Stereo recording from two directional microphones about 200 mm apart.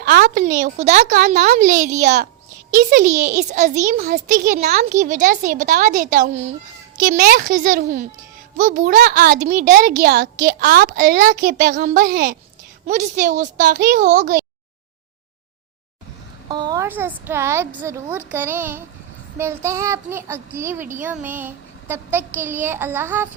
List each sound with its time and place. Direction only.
0.0 s a woman's voice: 50° right (ahead or behind)
16.5 s a child's voice: 20° right (ahead or behind)